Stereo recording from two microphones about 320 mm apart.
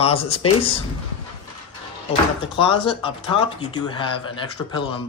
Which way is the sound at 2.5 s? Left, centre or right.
Centre.